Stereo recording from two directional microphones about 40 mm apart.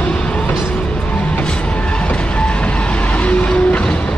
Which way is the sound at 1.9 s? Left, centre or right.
Left.